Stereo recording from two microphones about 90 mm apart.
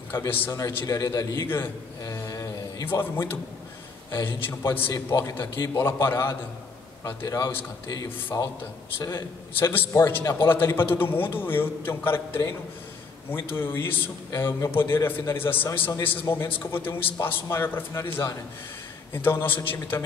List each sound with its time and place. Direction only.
0.5 s a man's voice: 35° left (ahead or behind)
2.1 s a sound: 40° left (ahead or behind)
2.9 s a man's voice: 25° left (ahead or behind)
9.1 s a man's voice: 25° left (ahead or behind)